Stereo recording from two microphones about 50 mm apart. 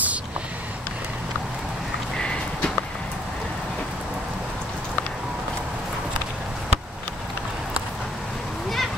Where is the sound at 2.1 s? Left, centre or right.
Centre.